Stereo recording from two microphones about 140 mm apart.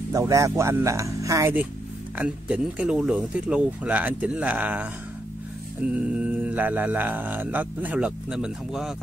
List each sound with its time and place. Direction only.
0.1 s speech: 25° right (ahead or behind)
2.1 s speech: 10° right (ahead or behind)